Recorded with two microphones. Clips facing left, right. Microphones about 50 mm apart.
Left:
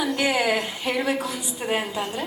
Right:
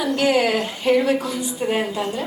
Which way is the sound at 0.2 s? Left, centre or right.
Centre.